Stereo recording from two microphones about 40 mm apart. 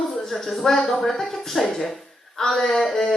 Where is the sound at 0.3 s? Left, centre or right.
Centre.